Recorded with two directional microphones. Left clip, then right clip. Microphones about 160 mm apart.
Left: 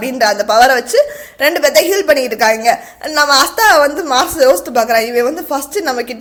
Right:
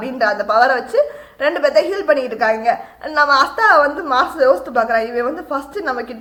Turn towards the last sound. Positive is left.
turn(degrees=35)  # may be behind; listen again after turning